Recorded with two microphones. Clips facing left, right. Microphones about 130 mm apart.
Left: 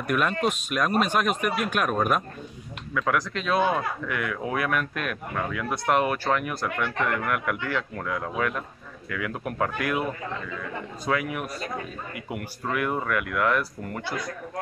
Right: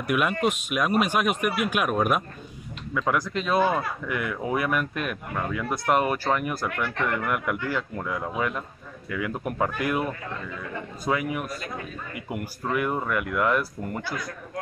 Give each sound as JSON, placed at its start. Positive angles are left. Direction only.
{"t": 0.0, "sound": "speech", "side_deg": -10}
{"t": 11.1, "sound": "speech", "side_deg": -5}